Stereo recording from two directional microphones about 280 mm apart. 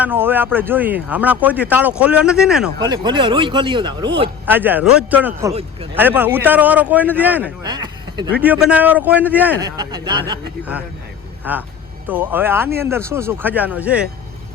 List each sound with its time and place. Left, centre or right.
0.0 s speech: centre
2.8 s speech: centre
4.4 s speech: centre
6.0 s speech: centre
8.4 s speech: centre